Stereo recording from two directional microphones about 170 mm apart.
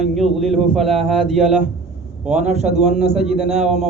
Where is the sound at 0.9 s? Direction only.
35° right (ahead or behind).